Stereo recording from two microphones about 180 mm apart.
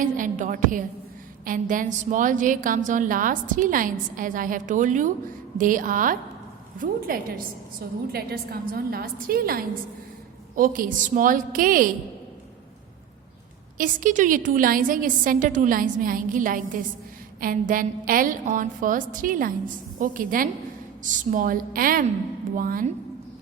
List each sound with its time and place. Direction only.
0.0 s a woman's voice: 45° right (ahead or behind)
13.7 s a woman's voice: 50° right (ahead or behind)